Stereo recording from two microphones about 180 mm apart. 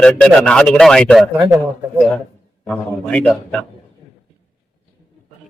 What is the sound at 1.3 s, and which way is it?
Speech, 10° right (ahead or behind).